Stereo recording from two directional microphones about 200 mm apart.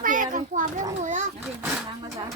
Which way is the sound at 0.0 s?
40° right (ahead or behind).